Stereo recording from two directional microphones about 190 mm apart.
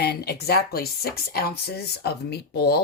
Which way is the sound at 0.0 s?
60° left (ahead or behind).